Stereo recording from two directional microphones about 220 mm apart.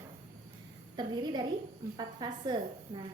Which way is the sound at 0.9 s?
20° right (ahead or behind).